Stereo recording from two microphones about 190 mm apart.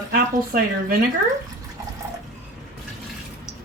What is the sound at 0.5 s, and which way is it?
Speech, 50° right (ahead or behind).